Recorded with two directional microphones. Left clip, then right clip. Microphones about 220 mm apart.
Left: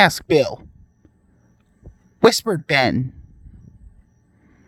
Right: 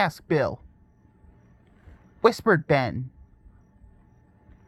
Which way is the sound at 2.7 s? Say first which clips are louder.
Left 6 dB; 40° left (ahead or behind).